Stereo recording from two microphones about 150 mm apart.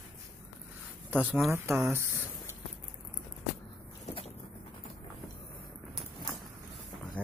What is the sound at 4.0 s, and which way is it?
Vehicle, 45° left (ahead or behind).